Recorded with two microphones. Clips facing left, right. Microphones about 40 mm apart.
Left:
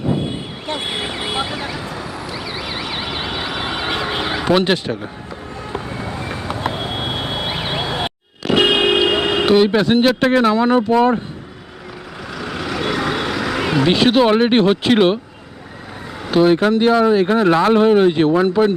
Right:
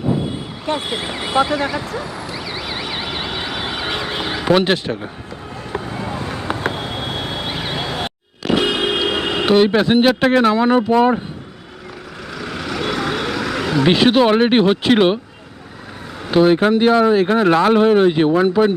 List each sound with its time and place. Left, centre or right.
1.0 s speech: centre
1.5 s speech: centre
2.0 s vehicle: centre
4.4 s speech: centre
6.7 s vehicle: centre
7.8 s a sound: centre
8.5 s a sound: left
9.0 s radio: left
9.5 s speech: centre
9.8 s speech: centre
12.3 s vehicle: centre
13.8 s speech: centre
16.3 s speech: centre